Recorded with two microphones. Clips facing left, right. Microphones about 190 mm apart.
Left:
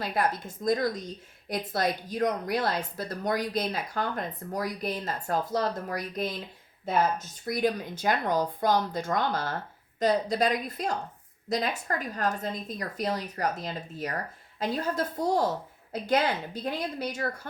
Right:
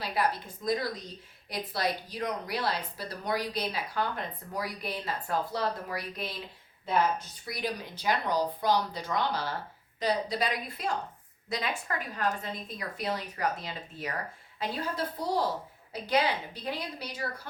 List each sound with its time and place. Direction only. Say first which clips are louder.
0.0 s a woman's voice: left 2 dB; 50° left (ahead or behind)